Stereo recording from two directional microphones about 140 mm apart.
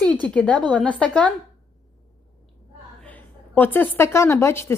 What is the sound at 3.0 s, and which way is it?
A woman's voice, 10° left (ahead or behind).